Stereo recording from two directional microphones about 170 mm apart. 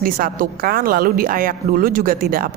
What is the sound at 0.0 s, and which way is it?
Speech, 55° right (ahead or behind).